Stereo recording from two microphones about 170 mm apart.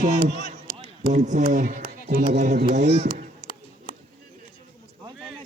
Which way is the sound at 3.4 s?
65° left (ahead or behind).